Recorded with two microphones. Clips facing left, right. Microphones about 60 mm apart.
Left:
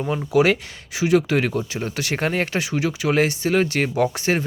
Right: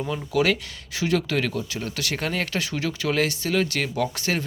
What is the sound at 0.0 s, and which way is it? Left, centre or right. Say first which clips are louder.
Speech: left 5 dB; left.